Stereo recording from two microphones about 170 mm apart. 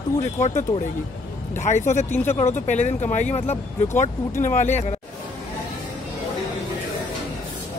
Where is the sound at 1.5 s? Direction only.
45° left (ahead or behind).